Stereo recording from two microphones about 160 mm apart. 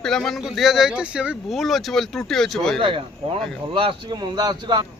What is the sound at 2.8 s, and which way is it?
A man's voice, 35° right (ahead or behind).